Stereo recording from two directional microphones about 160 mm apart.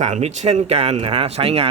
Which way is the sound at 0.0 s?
45° right (ahead or behind).